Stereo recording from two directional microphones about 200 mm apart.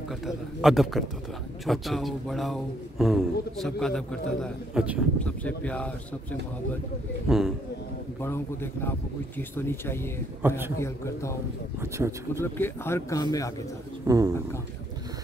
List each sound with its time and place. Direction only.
0.3 s a man's voice: centre (ahead or behind)
7.2 s a man's voice: centre (ahead or behind)
9.4 s speech: 10° left (ahead or behind)
10.4 s speech: 10° right (ahead or behind)
10.8 s speech: 15° left (ahead or behind)
11.8 s speech: 15° right (ahead or behind)
12.5 s speech: 10° left (ahead or behind)
14.0 s speech: 15° right (ahead or behind)